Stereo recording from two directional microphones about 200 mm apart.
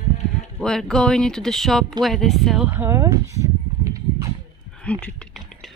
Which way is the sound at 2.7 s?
15° right (ahead or behind).